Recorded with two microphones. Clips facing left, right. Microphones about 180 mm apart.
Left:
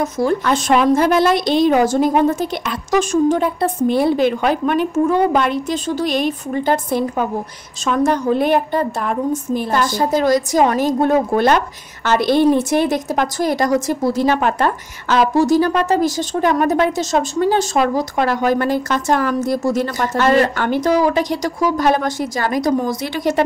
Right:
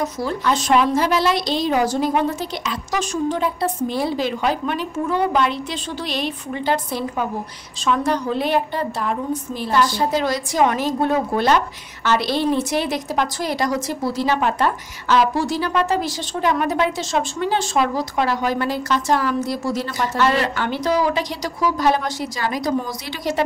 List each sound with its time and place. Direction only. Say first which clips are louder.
0.0 s a woman's voice: left 5 dB; 50° left (ahead or behind)